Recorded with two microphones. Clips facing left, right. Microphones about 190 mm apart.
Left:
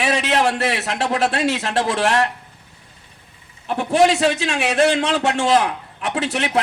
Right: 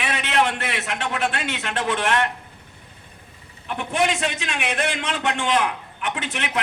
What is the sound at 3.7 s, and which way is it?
A man's voice, 35° left (ahead or behind).